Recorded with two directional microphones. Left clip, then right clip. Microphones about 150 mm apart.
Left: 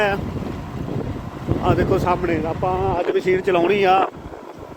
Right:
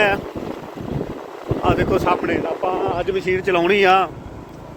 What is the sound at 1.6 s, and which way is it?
Speech, centre (ahead or behind).